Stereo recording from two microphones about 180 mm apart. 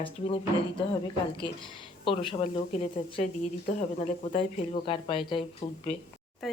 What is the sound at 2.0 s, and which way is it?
Speech, 30° left (ahead or behind).